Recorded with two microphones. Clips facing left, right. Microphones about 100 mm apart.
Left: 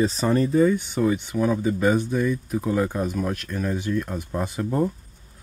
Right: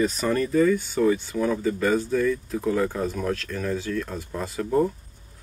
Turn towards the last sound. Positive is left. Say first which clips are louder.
# left 2 dB
turn(degrees=20)  # may be behind; listen again after turning